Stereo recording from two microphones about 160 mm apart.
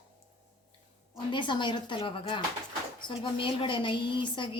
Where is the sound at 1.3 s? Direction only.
30° left (ahead or behind).